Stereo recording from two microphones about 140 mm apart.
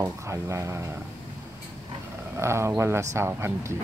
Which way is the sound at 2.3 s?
20° right (ahead or behind).